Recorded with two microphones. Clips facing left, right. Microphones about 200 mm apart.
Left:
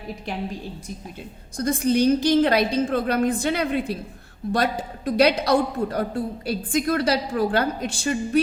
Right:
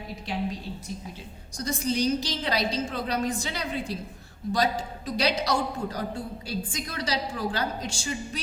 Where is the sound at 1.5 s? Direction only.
55° left (ahead or behind).